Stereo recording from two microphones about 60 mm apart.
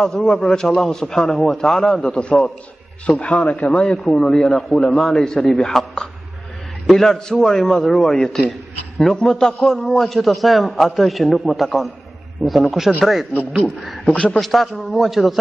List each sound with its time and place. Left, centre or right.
0.0 s a man's voice: centre
9.6 s a man's voice: centre
14.1 s a man's voice: left
14.4 s a man's voice: centre